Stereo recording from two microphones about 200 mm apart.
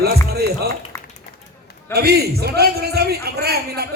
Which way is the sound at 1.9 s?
50° right (ahead or behind).